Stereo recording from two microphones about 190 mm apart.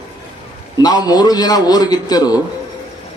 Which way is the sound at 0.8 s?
20° left (ahead or behind).